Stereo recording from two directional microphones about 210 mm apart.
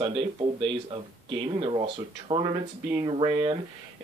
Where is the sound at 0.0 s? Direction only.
25° right (ahead or behind).